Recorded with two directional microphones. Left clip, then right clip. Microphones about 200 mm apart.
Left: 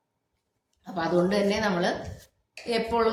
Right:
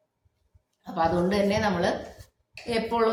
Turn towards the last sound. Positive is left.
turn(degrees=-5)  # may be behind; listen again after turning